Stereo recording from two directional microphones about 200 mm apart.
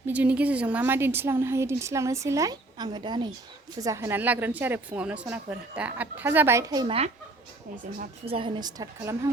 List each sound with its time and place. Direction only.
0.1 s a woman's voice: 5° right (ahead or behind); by 7.1 s 30° right (ahead or behind)
8.2 s a woman's voice: 25° right (ahead or behind)